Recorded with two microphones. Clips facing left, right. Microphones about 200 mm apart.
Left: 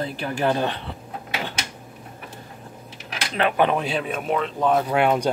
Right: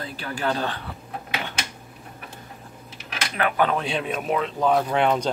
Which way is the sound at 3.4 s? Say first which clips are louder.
Left 2 dB; 20° left (ahead or behind).